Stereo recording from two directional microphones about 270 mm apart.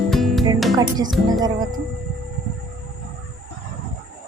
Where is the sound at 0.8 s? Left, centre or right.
Centre.